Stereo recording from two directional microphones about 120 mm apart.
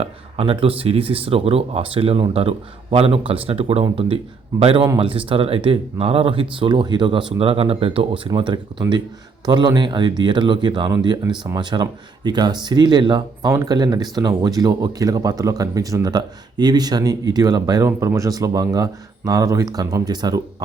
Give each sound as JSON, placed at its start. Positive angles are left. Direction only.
{"t": 0.0, "sound": "speech", "side_deg": -50}
{"t": 8.8, "sound": "speech", "side_deg": -30}